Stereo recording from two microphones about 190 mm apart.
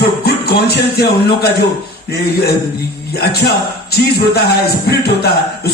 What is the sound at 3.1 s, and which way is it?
A man's voice, 55° left (ahead or behind).